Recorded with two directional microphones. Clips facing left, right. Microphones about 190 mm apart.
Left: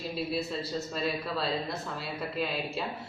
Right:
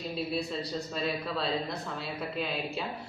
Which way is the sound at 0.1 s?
Centre (ahead or behind).